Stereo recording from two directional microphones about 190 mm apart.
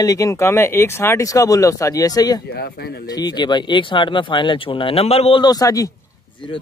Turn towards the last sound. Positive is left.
turn(degrees=20)  # may be behind; listen again after turning